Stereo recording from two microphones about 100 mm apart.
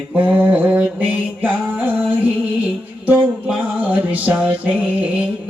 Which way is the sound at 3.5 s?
15° right (ahead or behind).